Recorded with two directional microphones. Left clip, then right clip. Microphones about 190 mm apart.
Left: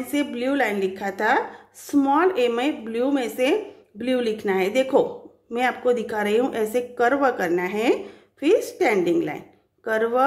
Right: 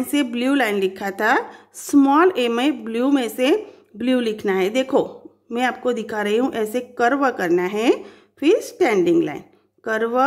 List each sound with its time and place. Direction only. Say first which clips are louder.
0.0 s a woman's voice: right 3 dB; 30° right (ahead or behind)